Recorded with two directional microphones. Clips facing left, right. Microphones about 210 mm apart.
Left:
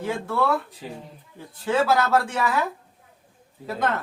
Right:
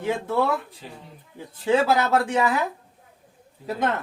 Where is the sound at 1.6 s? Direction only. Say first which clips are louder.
Right 1 dB; 20° right (ahead or behind).